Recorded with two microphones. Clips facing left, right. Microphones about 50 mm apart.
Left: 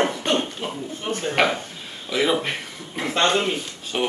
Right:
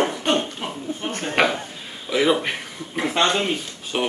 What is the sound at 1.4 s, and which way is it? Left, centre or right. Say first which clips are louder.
A man's voice: right 2 dB; centre.